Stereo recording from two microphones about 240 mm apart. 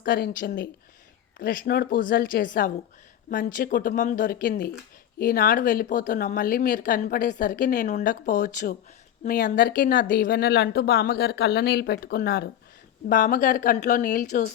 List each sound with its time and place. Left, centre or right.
0.0 s speech: left